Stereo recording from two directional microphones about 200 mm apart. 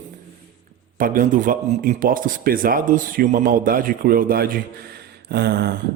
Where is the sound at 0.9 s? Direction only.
45° right (ahead or behind).